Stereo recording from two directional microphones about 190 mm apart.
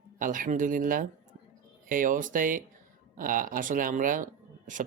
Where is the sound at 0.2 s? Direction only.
45° right (ahead or behind).